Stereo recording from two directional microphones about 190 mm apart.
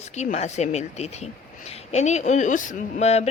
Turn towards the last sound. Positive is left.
turn(degrees=35)  # may be behind; listen again after turning